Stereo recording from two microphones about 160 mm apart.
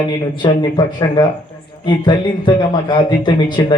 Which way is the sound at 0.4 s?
30° left (ahead or behind).